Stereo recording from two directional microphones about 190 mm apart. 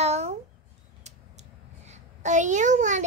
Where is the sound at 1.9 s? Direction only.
40° right (ahead or behind).